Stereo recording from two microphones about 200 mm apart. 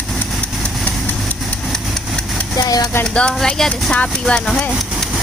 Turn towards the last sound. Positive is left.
turn(degrees=5)  # may be behind; listen again after turning